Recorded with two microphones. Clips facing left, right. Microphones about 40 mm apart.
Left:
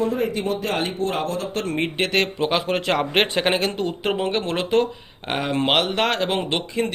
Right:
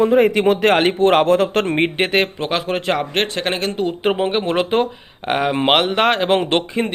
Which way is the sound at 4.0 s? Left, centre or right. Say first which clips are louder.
Right 5 dB; right.